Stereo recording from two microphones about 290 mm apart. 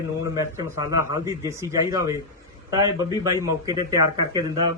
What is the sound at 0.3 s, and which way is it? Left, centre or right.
A man's voice, centre.